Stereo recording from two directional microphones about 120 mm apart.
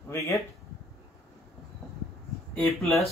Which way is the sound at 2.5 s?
5° left (ahead or behind).